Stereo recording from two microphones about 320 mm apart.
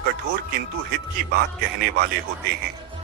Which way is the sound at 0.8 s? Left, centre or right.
Right.